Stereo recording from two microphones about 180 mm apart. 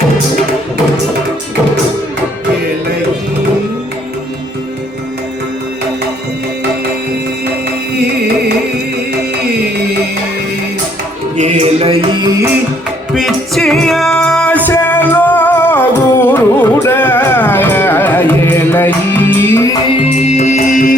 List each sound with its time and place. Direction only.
11.3 s music: 40° right (ahead or behind); by 12.5 s 20° right (ahead or behind)
13.1 s music: centre (ahead or behind)
20.2 s music: 40° left (ahead or behind)